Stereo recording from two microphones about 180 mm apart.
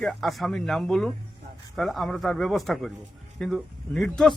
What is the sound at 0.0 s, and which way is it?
Speech, centre (ahead or behind).